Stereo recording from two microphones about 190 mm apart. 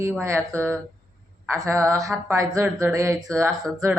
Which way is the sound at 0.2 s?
15° right (ahead or behind).